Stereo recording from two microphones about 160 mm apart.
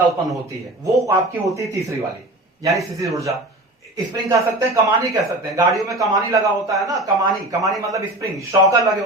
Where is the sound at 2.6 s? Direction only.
20° right (ahead or behind).